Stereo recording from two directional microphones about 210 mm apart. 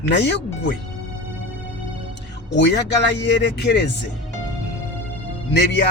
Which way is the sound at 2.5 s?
55° left (ahead or behind).